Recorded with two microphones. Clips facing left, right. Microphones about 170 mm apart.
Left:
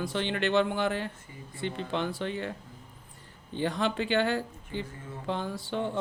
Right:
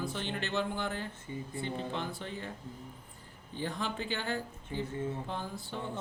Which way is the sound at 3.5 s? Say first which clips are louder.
Left 7 dB; 80° left.